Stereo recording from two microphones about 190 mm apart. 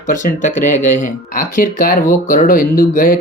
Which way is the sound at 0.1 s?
45° left (ahead or behind).